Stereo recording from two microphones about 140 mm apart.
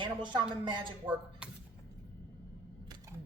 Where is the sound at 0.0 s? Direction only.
35° right (ahead or behind).